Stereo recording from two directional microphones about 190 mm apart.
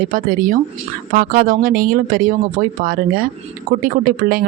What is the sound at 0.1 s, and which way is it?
Speech, 50° right (ahead or behind).